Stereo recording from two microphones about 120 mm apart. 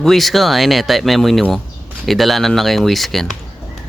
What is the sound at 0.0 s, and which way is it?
Speech, centre (ahead or behind).